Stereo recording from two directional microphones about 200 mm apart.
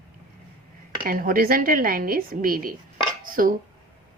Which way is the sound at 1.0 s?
45° right (ahead or behind).